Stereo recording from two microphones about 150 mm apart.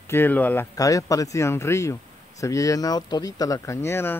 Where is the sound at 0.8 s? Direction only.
20° left (ahead or behind).